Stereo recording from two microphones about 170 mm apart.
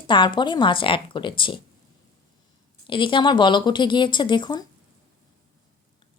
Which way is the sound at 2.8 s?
30° left (ahead or behind).